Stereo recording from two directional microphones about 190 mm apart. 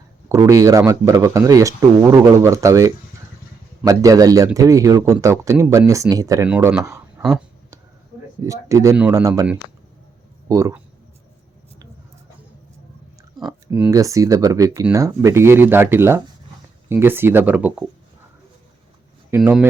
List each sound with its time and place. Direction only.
0.3 s speech: 15° right (ahead or behind)
6.5 s speech: 5° right (ahead or behind)
8.4 s speech: 15° right (ahead or behind)
10.5 s speech: 20° right (ahead or behind)
13.7 s speech: 5° right (ahead or behind)
13.9 s speech: 15° right (ahead or behind)
19.3 s speech: 5° right (ahead or behind)